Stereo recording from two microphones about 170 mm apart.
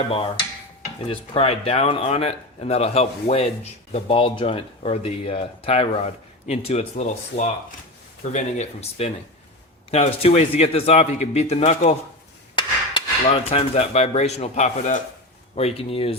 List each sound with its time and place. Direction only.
0.1 s speech: 30° left (ahead or behind)
12.5 s dishes: 30° left (ahead or behind)
15.5 s speech: 35° left (ahead or behind)